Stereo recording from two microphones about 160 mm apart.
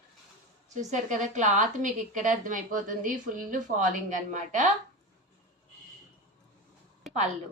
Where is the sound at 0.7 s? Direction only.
50° right (ahead or behind).